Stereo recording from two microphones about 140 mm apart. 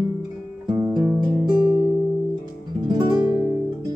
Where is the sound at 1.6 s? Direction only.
35° right (ahead or behind).